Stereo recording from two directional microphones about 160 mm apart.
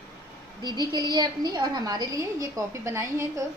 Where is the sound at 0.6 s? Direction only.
25° right (ahead or behind).